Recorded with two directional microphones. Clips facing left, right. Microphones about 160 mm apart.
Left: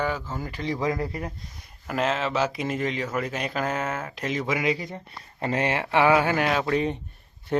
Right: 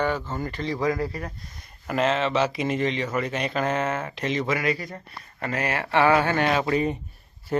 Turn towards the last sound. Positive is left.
turn(degrees=-5)  # may be behind; listen again after turning